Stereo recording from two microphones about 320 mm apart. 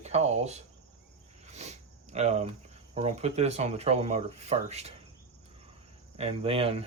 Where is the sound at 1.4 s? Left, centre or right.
Right.